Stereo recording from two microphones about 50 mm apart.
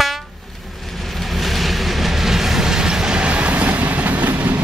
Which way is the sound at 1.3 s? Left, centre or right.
Centre.